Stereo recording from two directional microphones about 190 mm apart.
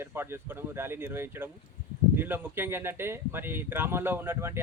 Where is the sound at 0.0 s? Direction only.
10° right (ahead or behind).